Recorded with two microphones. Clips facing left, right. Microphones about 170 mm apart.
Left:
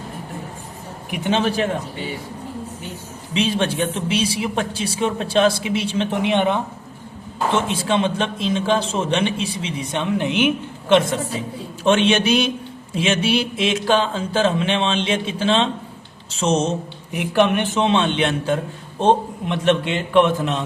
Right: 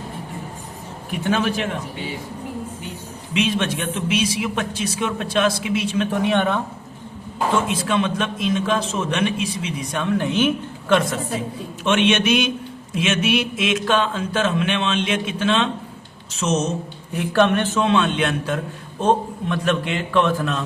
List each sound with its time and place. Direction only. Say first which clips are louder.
1.1 s a man's voice: left 1 dB; 20° left (ahead or behind)
3.3 s speech: left 1 dB; 30° left (ahead or behind)
7.5 s a man's voice: left 1 dB; 30° left (ahead or behind)
17.2 s a man's voice: even; 15° left (ahead or behind)